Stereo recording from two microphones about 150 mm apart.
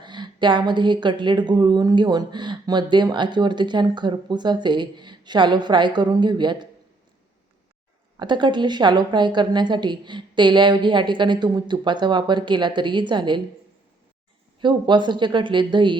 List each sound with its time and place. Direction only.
0.0 s a woman's voice: 30° right (ahead or behind)
8.2 s a woman's voice: 30° right (ahead or behind)
14.6 s a woman's voice: 30° right (ahead or behind)